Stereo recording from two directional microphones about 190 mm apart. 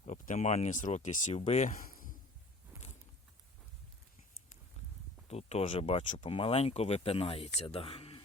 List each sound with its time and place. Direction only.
0.0 s speech: 35° left (ahead or behind)
5.3 s speech: 35° left (ahead or behind)